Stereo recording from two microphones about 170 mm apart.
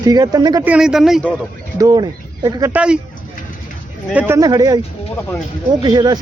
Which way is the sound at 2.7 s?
5° right (ahead or behind).